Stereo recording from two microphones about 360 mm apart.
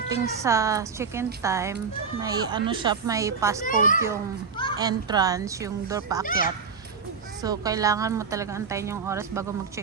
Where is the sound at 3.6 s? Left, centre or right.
Left.